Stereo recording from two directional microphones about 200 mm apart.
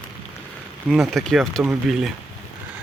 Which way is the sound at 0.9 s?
Centre (ahead or behind).